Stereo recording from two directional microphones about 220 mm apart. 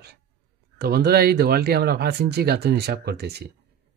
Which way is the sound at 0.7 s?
45° right (ahead or behind).